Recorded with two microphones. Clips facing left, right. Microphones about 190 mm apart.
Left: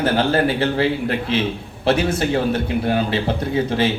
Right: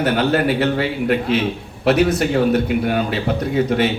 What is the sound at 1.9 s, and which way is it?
A man's voice, 30° left (ahead or behind).